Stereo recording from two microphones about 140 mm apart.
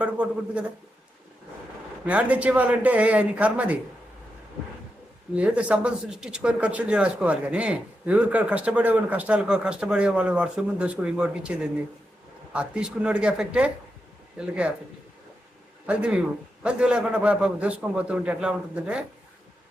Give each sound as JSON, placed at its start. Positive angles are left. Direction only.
{"t": 0.0, "sound": "speech", "side_deg": -10}
{"t": 2.0, "sound": "speech", "side_deg": -10}
{"t": 5.4, "sound": "speech", "side_deg": -10}
{"t": 15.9, "sound": "speech", "side_deg": -10}